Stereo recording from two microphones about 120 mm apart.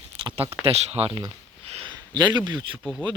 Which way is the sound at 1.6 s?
60° right (ahead or behind).